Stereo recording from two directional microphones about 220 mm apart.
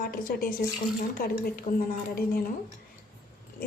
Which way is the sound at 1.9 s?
40° left (ahead or behind).